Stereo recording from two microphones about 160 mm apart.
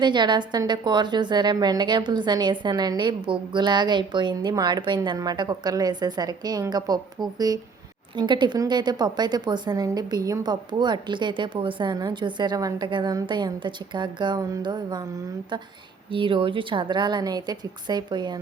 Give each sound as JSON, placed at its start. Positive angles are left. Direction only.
{"t": 0.0, "sound": "a woman's voice", "side_deg": -30}
{"t": 16.1, "sound": "a woman's voice", "side_deg": -30}